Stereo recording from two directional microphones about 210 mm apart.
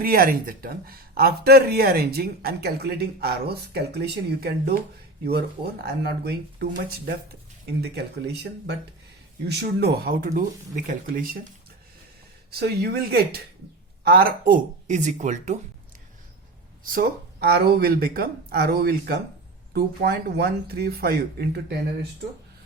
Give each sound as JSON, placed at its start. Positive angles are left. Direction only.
{"t": 0.0, "sound": "speech", "side_deg": -45}
{"t": 12.5, "sound": "speech", "side_deg": -50}
{"t": 16.8, "sound": "speech", "side_deg": -45}